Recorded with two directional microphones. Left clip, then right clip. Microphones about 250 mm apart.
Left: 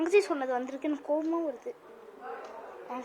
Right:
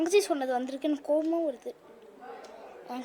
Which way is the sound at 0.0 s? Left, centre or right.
Right.